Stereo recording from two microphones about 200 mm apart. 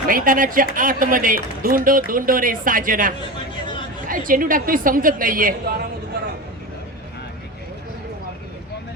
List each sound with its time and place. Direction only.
0.1 s speech: 45° right (ahead or behind)